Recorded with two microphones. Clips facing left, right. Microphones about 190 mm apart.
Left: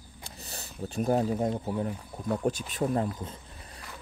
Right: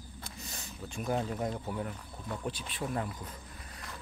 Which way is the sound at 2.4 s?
45° left (ahead or behind).